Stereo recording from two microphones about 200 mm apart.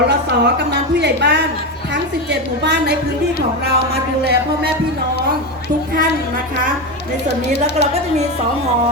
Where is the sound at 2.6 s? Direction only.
55° right (ahead or behind).